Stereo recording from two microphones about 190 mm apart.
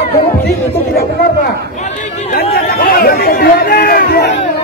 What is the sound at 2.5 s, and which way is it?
Speech, 50° left (ahead or behind).